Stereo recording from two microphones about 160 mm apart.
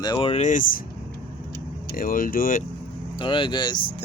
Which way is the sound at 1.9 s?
60° left (ahead or behind).